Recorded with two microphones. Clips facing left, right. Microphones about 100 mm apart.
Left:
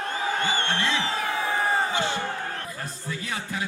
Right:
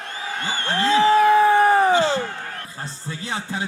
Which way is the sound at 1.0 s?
60° right (ahead or behind).